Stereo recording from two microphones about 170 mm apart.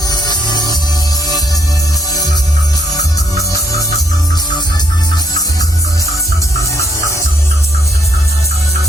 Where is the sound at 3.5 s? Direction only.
20° left (ahead or behind).